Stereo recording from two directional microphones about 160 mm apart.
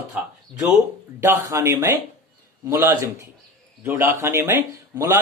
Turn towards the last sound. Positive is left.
turn(degrees=-15)  # may be behind; listen again after turning